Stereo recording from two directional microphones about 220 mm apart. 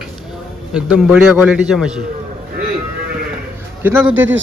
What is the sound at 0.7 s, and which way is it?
Speech, 5° right (ahead or behind).